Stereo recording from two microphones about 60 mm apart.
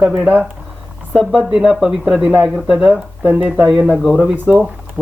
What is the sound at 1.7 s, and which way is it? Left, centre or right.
Speech, centre.